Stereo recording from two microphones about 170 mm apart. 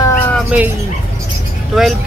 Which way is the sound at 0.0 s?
15° left (ahead or behind).